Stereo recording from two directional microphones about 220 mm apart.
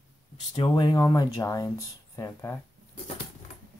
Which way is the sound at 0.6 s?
20° left (ahead or behind).